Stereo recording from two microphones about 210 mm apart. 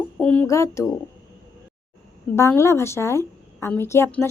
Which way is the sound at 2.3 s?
15° left (ahead or behind).